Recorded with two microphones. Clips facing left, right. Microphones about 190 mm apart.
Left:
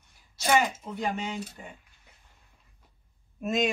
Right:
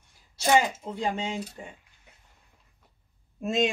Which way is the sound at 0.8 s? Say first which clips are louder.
Right 2 dB; 30° right (ahead or behind).